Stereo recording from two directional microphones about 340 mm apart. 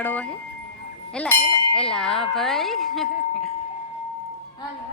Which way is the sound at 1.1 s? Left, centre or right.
Centre.